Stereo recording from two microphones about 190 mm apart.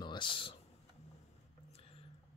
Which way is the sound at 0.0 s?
25° left (ahead or behind).